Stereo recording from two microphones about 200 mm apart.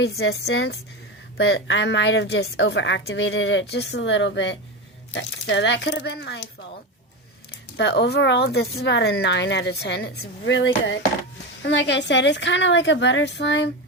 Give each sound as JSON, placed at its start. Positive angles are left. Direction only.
{"t": 0.0, "sound": "speech", "side_deg": 55}
{"t": 7.8, "sound": "speech", "side_deg": 55}